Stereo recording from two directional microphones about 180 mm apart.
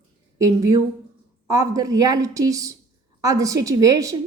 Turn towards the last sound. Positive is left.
turn(degrees=-20)  # may be behind; listen again after turning